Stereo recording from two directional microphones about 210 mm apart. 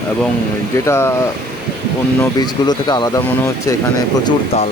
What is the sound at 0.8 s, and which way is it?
Speech, 10° left (ahead or behind).